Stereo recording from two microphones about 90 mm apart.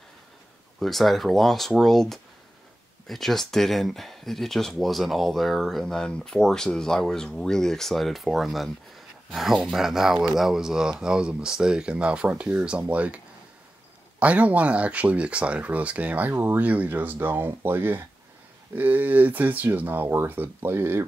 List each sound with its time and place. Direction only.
0.7 s speech: centre (ahead or behind); by 13.2 s 15° right (ahead or behind)
14.2 s speech: 15° right (ahead or behind)